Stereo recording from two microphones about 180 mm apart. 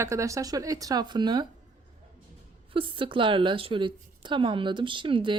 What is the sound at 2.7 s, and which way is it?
Speech, 30° right (ahead or behind).